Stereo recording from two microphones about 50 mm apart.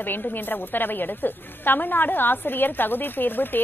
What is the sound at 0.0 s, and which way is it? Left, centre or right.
A woman's voice, left.